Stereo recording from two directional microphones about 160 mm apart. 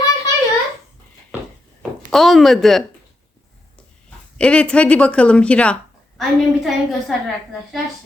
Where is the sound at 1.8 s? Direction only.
Centre (ahead or behind).